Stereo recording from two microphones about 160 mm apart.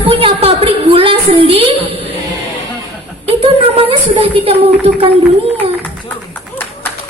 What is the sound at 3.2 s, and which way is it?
A woman's voice, 35° right (ahead or behind).